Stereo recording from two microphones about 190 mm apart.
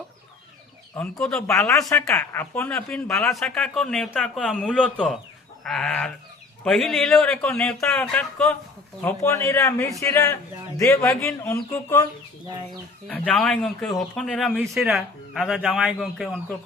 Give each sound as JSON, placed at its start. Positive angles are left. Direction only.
{"t": 0.9, "sound": "speech", "side_deg": 5}
{"t": 1.9, "sound": "speech", "side_deg": 15}
{"t": 13.1, "sound": "speech", "side_deg": 5}